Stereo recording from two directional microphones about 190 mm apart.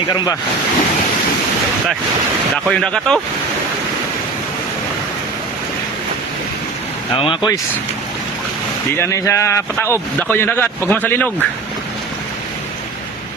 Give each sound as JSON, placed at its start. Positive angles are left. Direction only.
{"t": 2.6, "sound": "speech", "side_deg": 5}
{"t": 7.2, "sound": "speech", "side_deg": 20}
{"t": 9.0, "sound": "speech", "side_deg": 15}